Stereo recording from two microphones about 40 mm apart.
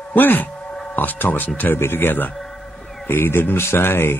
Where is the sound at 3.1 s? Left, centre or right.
Left.